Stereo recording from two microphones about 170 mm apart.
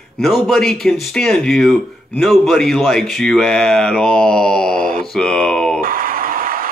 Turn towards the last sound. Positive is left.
turn(degrees=-55)  # may be behind; listen again after turning